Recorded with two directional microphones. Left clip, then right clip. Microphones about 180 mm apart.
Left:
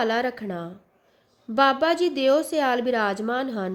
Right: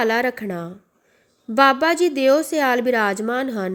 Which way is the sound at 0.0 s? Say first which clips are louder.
Right 4 dB; 15° right (ahead or behind).